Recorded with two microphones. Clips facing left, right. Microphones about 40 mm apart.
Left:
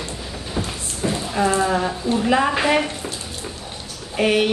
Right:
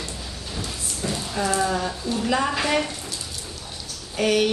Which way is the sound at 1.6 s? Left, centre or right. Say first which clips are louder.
Left 4 dB; centre.